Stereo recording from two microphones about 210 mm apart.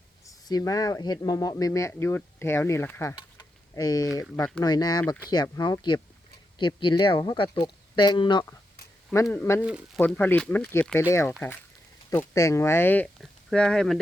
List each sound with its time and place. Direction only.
0.3 s speech: 15° left (ahead or behind)
9.2 s speech: 10° left (ahead or behind)
9.6 s speech: 5° right (ahead or behind)
10.0 s speech: 10° left (ahead or behind)